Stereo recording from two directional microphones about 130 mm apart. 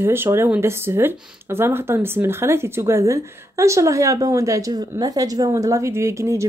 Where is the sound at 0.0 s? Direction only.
20° right (ahead or behind).